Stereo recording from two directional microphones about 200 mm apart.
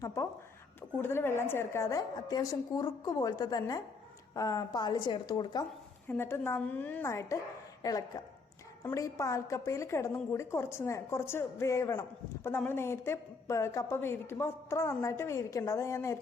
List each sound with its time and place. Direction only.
0.0 s a woman's voice: 15° left (ahead or behind)